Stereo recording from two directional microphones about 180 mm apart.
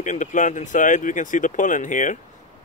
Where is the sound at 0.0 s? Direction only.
45° left (ahead or behind).